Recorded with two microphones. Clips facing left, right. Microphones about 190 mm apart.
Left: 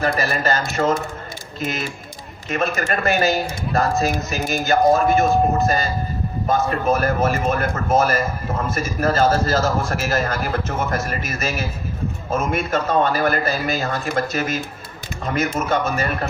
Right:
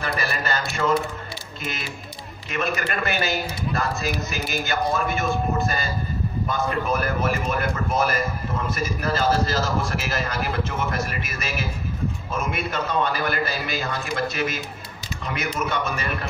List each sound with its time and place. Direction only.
0.0 s a man's voice: 45° left (ahead or behind)
2.5 s a man's voice: 45° left (ahead or behind)